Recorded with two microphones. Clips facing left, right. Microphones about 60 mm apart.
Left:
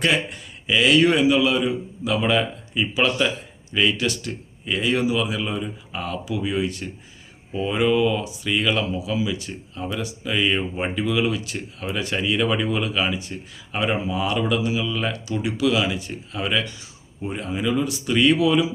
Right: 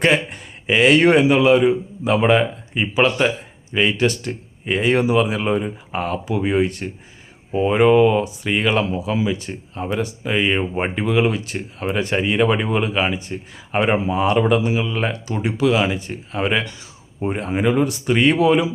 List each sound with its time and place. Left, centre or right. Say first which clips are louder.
0.0 s speech: right 4 dB; right